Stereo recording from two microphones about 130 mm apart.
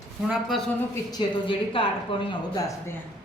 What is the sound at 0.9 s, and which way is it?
Speech, 30° left (ahead or behind).